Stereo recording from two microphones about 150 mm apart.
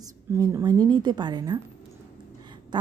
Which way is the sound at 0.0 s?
25° right (ahead or behind).